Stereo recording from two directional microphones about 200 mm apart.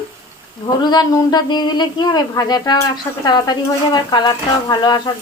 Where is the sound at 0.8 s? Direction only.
20° left (ahead or behind).